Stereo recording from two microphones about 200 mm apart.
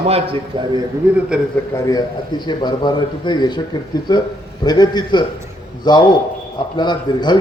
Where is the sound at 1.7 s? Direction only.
15° left (ahead or behind).